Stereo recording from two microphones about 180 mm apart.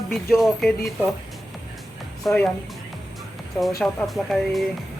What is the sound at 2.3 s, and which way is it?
Speech, 5° left (ahead or behind).